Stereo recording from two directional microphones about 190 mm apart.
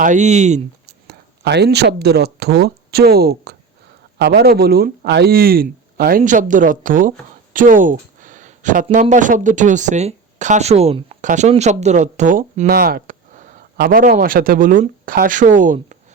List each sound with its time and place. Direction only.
0.0 s speech: 40° right (ahead or behind)
0.9 s speech: 60° right (ahead or behind); by 16.0 s 40° right (ahead or behind)